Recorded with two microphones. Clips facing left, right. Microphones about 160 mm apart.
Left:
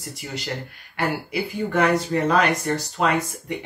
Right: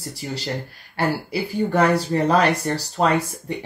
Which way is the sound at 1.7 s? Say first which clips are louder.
Right 1 dB; 35° right (ahead or behind).